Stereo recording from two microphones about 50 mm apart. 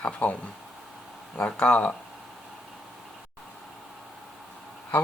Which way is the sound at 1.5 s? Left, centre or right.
Left.